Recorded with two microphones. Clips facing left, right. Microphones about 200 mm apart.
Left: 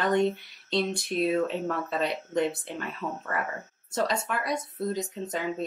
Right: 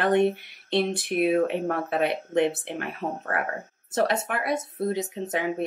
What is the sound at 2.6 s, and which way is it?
Speech, 60° right (ahead or behind).